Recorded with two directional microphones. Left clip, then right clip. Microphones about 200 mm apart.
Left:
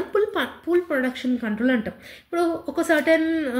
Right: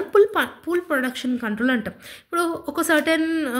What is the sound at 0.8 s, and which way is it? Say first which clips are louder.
A woman's voice: right 1 dB; 55° right (ahead or behind).